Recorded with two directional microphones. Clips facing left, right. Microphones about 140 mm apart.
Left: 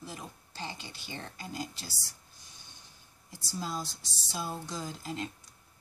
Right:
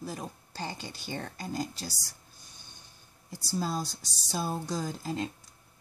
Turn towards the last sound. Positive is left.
turn(degrees=-35)  # may be behind; listen again after turning